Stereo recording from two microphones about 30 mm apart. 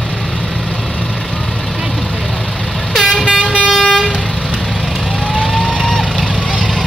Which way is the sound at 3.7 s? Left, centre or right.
Centre.